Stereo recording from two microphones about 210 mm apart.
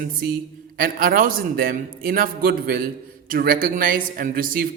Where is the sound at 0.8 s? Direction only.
45° right (ahead or behind).